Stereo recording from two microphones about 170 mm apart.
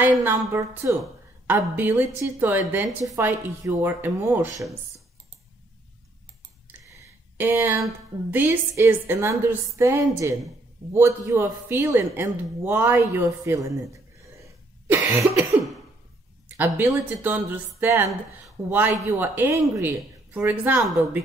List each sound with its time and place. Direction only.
0.0 s a man's voice: 10° right (ahead or behind)
7.3 s a man's voice: 15° right (ahead or behind)
14.4 s cough: 15° right (ahead or behind)
16.4 s a man's voice: 10° right (ahead or behind)